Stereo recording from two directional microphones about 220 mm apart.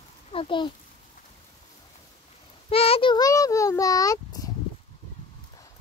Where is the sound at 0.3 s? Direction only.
25° left (ahead or behind).